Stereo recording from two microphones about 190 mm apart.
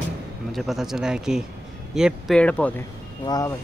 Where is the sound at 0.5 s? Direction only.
Centre (ahead or behind).